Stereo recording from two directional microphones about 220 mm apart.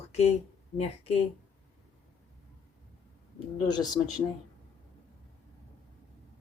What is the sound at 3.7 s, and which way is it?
Speech, 20° left (ahead or behind).